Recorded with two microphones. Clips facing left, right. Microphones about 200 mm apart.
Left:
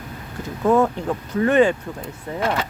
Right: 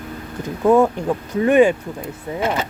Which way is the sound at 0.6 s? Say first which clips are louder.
Right 3 dB; 10° right (ahead or behind).